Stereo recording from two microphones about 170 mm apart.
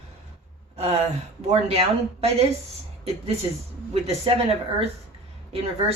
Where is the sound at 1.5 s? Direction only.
35° right (ahead or behind).